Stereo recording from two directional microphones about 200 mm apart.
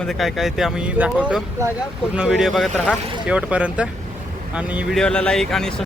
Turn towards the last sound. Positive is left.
turn(degrees=0)  # may be behind; listen again after turning